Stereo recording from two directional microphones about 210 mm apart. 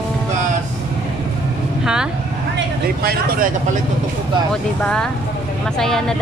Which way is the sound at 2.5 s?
45° right (ahead or behind).